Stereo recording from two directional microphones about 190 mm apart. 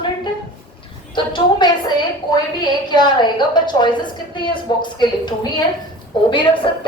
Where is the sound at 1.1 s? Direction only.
25° left (ahead or behind).